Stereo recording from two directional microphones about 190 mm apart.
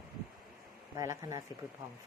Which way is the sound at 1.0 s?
15° right (ahead or behind).